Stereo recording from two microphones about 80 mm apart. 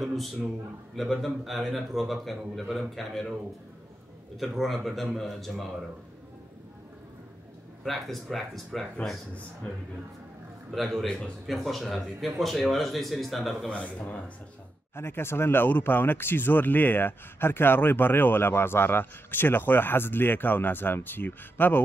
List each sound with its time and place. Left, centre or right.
0.0 s a man's voice: centre
4.4 s a man's voice: centre
7.8 s a man's voice: centre
10.7 s a man's voice: centre
13.7 s a man's voice: centre
15.0 s speech: left